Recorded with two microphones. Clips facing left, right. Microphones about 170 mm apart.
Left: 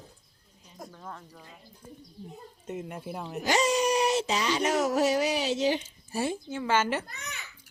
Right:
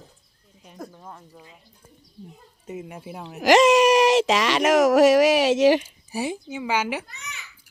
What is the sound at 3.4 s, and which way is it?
Speech, 90° right.